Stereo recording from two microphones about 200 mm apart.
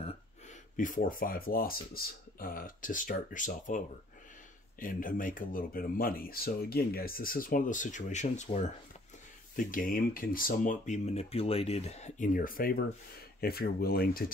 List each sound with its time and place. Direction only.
0.7 s speech: 40° left (ahead or behind)